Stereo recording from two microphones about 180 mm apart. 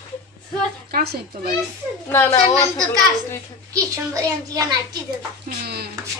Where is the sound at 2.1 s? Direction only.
15° left (ahead or behind).